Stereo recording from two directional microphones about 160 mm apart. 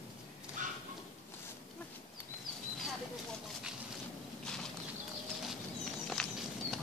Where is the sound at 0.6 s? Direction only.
55° right (ahead or behind).